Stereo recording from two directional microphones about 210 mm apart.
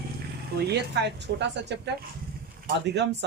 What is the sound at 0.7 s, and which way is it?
Speech, 55° right (ahead or behind).